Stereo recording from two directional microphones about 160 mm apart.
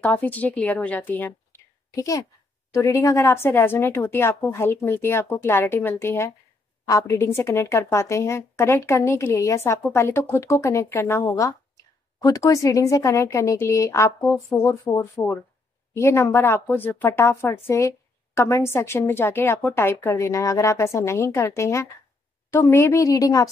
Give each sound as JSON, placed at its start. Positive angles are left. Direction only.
{"t": 0.0, "sound": "a woman's voice", "side_deg": 10}